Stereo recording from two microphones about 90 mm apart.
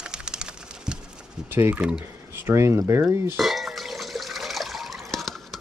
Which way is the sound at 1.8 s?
10° right (ahead or behind).